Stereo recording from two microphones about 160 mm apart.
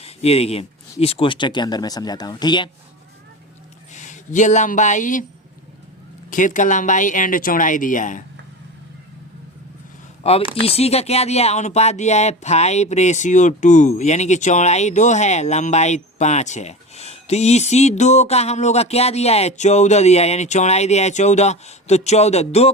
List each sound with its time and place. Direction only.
0.0 s speech: 40° left (ahead or behind)
3.9 s speech: 50° left (ahead or behind)
6.3 s speech: 55° left (ahead or behind)
10.5 s speech: 40° left (ahead or behind)